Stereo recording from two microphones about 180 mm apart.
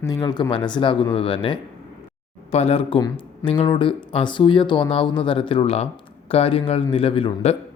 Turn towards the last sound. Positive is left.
turn(degrees=30)  # may be behind; listen again after turning